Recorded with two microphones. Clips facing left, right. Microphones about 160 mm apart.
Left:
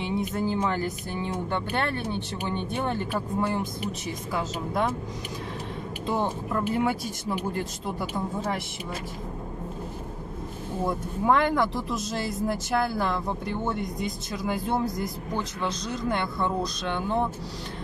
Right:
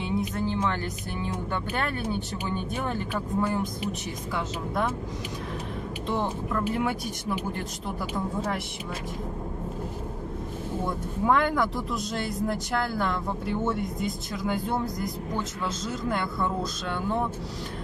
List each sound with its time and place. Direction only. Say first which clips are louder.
0.0 s speech: left 1 dB; 5° left (ahead or behind)
3.3 s speech: right 2 dB; 10° left (ahead or behind)
6.0 s speech: left 1 dB; 10° left (ahead or behind)
11.2 s speech: left 1 dB; centre (ahead or behind)